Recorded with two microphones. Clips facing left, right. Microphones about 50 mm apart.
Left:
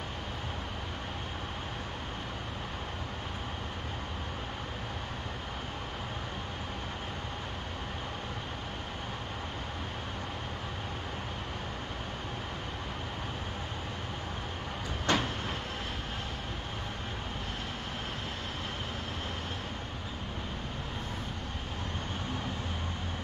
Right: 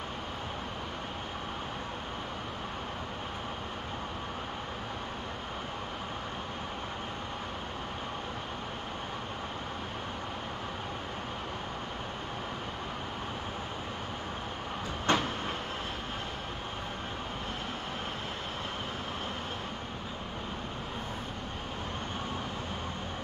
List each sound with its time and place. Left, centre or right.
15.1 s vehicle: right